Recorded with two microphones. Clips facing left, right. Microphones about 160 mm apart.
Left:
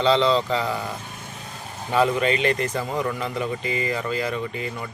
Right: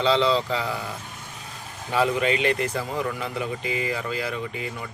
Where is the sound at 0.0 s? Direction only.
10° right (ahead or behind).